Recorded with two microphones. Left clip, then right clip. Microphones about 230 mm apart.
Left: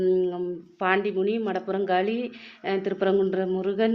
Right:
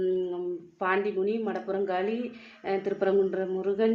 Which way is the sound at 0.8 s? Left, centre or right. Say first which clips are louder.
Left 3 dB; left.